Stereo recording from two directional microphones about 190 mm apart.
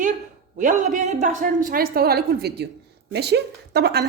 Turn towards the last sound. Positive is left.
turn(degrees=-60)  # may be behind; listen again after turning